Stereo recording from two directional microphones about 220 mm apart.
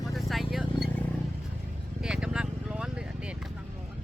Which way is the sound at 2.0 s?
5° right (ahead or behind).